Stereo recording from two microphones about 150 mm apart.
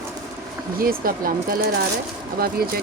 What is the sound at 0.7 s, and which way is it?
Speech, 70° right (ahead or behind).